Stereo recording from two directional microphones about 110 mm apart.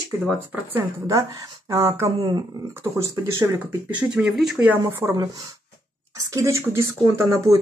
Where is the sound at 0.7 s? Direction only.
30° right (ahead or behind).